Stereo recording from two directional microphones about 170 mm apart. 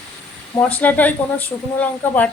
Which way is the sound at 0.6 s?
10° left (ahead or behind).